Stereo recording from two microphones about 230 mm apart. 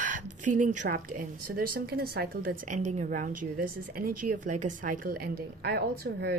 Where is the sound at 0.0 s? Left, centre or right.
Right.